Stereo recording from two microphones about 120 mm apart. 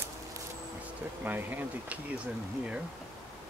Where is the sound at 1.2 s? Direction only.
15° right (ahead or behind).